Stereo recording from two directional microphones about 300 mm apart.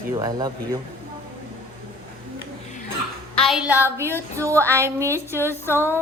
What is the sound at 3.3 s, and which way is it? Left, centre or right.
A woman's voice, centre.